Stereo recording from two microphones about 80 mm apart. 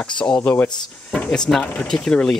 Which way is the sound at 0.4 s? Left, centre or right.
Centre.